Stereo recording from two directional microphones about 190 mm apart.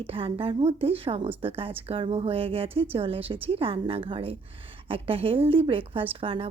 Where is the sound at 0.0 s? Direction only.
30° right (ahead or behind).